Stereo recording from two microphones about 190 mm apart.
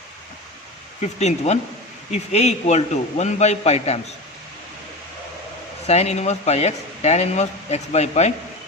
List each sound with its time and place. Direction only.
1.0 s speech: 35° left (ahead or behind)
5.9 s speech: 35° left (ahead or behind)